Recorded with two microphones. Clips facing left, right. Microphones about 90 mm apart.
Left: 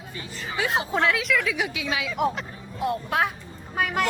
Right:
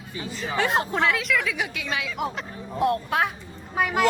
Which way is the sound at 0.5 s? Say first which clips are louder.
Right 1 dB; 5° left (ahead or behind).